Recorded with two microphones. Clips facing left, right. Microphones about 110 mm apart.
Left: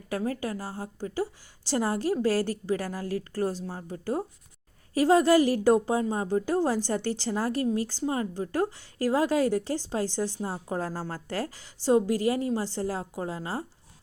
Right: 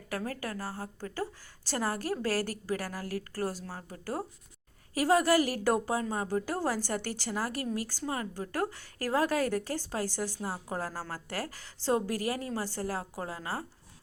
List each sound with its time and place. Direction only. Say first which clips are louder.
0.1 s a woman's voice: left 6 dB; 20° left (ahead or behind)